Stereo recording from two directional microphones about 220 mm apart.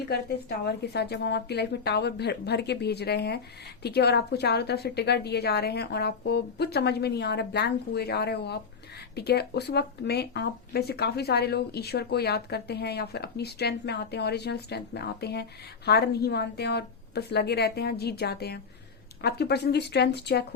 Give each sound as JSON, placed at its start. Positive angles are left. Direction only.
{"t": 0.1, "sound": "speech", "side_deg": 45}